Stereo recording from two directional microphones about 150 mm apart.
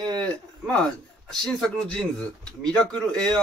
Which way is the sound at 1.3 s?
5° left (ahead or behind).